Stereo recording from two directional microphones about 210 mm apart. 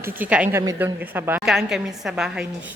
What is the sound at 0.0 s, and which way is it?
A woman's voice, 10° right (ahead or behind).